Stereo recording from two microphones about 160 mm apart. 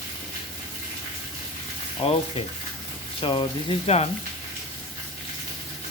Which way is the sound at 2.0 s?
35° left (ahead or behind).